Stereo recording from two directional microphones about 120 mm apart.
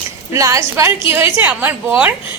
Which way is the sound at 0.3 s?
25° right (ahead or behind).